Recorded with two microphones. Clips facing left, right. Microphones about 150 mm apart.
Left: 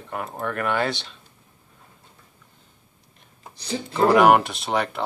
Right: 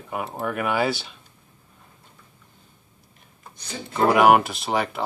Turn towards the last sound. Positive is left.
turn(degrees=-5)  # may be behind; listen again after turning